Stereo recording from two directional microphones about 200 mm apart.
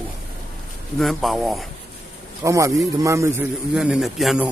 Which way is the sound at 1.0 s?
Centre (ahead or behind).